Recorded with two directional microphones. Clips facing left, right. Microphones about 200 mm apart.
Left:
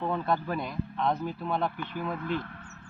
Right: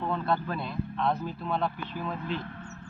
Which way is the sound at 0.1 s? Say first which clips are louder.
Right 1 dB; 15° left (ahead or behind).